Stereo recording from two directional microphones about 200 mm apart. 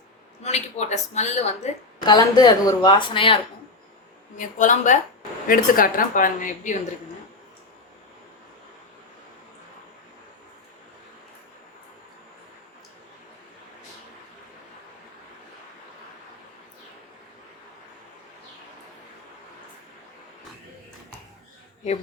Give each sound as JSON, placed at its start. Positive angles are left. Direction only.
{"t": 0.4, "sound": "speech", "side_deg": 35}
{"t": 2.0, "sound": "a woman's voice", "side_deg": 20}
{"t": 4.4, "sound": "a woman's voice", "side_deg": 40}